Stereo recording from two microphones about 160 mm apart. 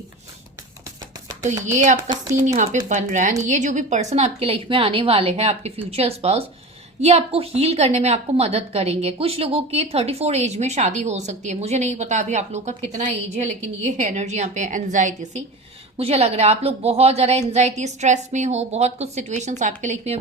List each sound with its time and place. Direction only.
1.6 s a woman's voice: 50° right (ahead or behind)